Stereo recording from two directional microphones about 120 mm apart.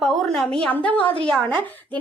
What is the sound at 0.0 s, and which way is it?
A woman's voice, centre (ahead or behind).